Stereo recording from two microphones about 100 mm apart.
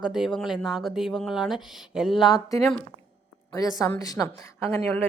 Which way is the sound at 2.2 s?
40° left (ahead or behind).